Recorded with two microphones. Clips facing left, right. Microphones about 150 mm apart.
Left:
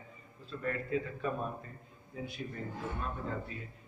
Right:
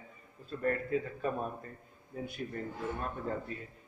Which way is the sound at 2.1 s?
50° right (ahead or behind).